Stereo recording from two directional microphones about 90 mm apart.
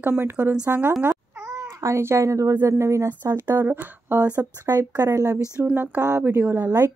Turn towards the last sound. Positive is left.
turn(degrees=-25)  # may be behind; listen again after turning